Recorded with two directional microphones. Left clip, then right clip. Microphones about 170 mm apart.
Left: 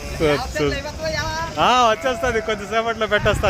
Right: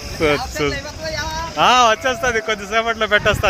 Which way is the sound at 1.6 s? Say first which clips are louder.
Right 3 dB; centre (ahead or behind).